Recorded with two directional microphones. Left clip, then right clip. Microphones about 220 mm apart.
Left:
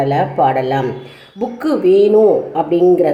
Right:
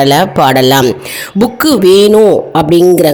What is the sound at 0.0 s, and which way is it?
A woman's voice, 50° right (ahead or behind).